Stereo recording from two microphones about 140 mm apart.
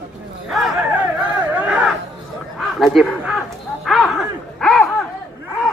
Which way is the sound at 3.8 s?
Centre (ahead or behind).